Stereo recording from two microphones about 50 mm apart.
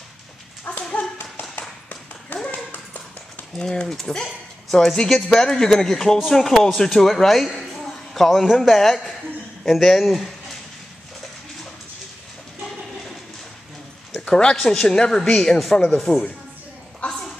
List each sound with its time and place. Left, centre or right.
0.7 s dog: left
2.5 s dog: left
3.5 s a man's voice: centre
14.3 s speech: centre
17.0 s a sound: left